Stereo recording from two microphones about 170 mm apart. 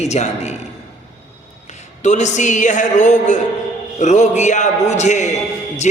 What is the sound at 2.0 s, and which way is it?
A man's voice, 45° left (ahead or behind).